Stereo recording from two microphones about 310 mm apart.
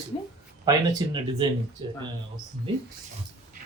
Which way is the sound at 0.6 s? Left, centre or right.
Centre.